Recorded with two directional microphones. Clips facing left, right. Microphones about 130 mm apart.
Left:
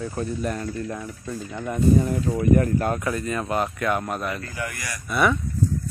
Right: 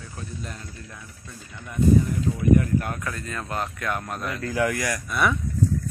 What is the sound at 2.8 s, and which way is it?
Speech, 30° left (ahead or behind).